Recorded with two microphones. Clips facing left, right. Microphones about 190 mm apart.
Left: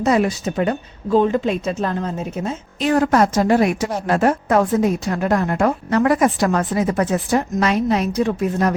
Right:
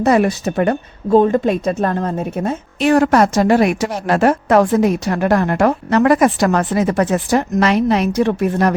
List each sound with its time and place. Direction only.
0.0 s speech: 60° right (ahead or behind)